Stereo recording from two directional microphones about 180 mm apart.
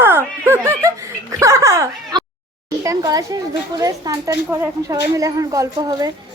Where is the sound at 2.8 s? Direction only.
20° right (ahead or behind).